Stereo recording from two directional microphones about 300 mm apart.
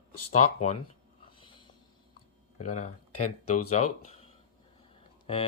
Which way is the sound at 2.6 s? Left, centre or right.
Left.